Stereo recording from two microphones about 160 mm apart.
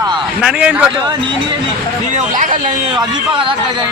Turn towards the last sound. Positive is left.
turn(degrees=-55)  # may be behind; listen again after turning